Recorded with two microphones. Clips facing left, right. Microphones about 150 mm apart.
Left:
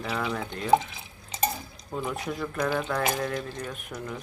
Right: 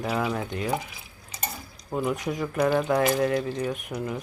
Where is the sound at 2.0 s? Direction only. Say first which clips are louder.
Right 4 dB; 15° right (ahead or behind).